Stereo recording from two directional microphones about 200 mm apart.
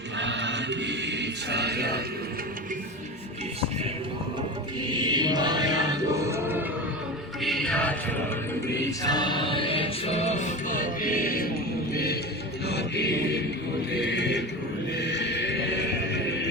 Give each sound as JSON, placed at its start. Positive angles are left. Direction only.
{"t": 0.2, "sound": "chant", "side_deg": -65}
{"t": 4.9, "sound": "music", "side_deg": -20}
{"t": 7.4, "sound": "music", "side_deg": 0}
{"t": 9.0, "sound": "music", "side_deg": 20}
{"t": 12.6, "sound": "music", "side_deg": 55}
{"t": 14.0, "sound": "neigh", "side_deg": 60}
{"t": 14.9, "sound": "music", "side_deg": 60}